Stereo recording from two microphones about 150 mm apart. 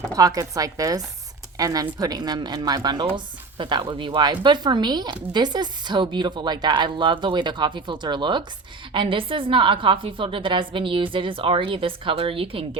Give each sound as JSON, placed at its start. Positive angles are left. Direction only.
{"t": 0.2, "sound": "a woman's voice", "side_deg": -25}